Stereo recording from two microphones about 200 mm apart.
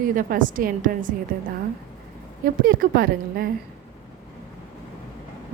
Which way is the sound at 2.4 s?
45° right (ahead or behind).